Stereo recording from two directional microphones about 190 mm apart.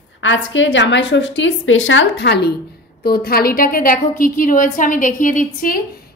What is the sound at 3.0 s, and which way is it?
A woman's voice, 55° left (ahead or behind).